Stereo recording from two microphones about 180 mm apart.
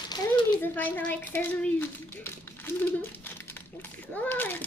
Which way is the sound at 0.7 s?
10° left (ahead or behind).